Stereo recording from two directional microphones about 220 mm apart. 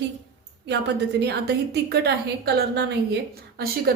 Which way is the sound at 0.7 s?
50° right (ahead or behind).